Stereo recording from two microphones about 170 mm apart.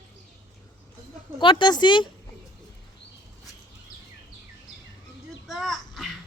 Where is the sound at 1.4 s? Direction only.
30° left (ahead or behind).